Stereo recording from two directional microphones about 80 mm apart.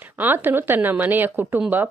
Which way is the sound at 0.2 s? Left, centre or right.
Right.